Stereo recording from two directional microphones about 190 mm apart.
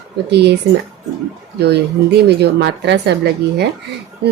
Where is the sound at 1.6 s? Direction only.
60° right (ahead or behind).